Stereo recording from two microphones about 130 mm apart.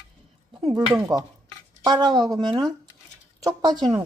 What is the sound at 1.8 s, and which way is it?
Speech, 30° right (ahead or behind).